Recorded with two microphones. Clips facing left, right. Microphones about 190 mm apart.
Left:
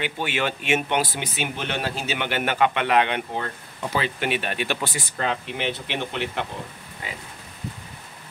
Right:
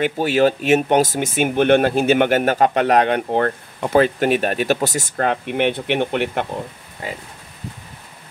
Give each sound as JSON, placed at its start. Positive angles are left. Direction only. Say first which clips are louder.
{"t": 0.0, "sound": "speech", "louder": "right 10 dB", "side_deg": -40}
{"t": 3.3, "sound": "speech", "louder": "right 11 dB", "side_deg": -60}
{"t": 7.0, "sound": "speech", "louder": "right 7 dB", "side_deg": -40}